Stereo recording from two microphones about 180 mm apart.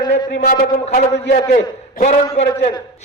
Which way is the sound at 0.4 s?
55° left (ahead or behind).